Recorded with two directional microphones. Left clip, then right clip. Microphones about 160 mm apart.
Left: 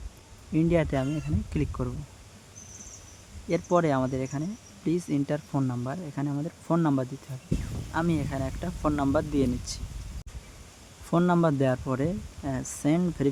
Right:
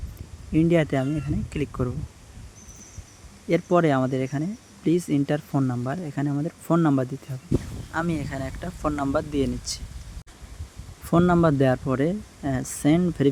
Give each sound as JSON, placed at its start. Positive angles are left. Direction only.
{"t": 0.5, "sound": "speech", "side_deg": -15}
{"t": 3.5, "sound": "speech", "side_deg": -15}
{"t": 11.1, "sound": "speech", "side_deg": -10}